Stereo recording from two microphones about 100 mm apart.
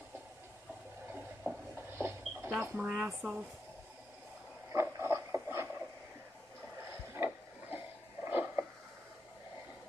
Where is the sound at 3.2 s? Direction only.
20° right (ahead or behind).